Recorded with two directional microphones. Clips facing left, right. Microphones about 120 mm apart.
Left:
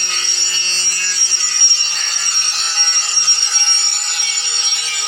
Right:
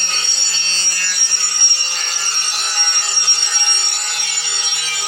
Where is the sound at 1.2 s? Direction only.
50° right (ahead or behind).